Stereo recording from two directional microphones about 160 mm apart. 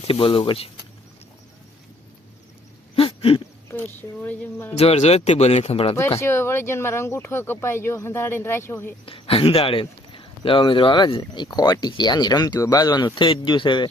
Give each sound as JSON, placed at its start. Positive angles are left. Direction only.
{"t": 0.1, "sound": "speech", "side_deg": 35}
{"t": 2.9, "sound": "a sound", "side_deg": 35}
{"t": 3.7, "sound": "speech", "side_deg": 10}
{"t": 4.8, "sound": "speech", "side_deg": 40}
{"t": 6.1, "sound": "speech", "side_deg": 15}
{"t": 9.0, "sound": "speech", "side_deg": 35}